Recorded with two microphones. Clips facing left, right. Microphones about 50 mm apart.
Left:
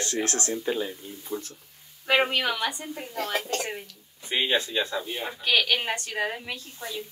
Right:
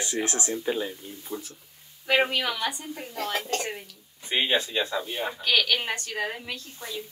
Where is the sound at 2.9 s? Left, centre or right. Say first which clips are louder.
Left 1 dB; centre.